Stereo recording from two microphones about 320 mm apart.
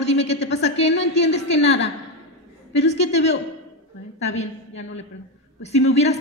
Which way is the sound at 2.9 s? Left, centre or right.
Centre.